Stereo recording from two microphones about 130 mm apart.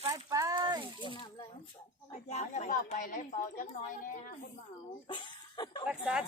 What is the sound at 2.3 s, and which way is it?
Speech, 70° left (ahead or behind).